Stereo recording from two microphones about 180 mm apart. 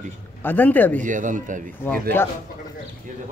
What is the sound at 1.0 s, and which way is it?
Speech, 45° right (ahead or behind).